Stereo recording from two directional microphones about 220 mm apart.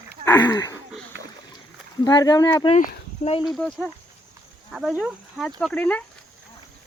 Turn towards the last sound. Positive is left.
turn(degrees=5)  # may be behind; listen again after turning